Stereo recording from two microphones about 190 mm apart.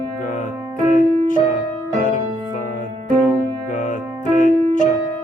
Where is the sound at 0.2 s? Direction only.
40° left (ahead or behind).